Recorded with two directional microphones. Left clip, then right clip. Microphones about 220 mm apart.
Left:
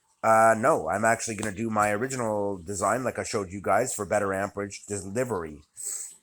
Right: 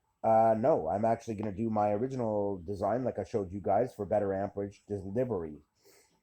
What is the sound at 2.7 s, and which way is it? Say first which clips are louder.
Speech: left 5 dB; 10° left (ahead or behind).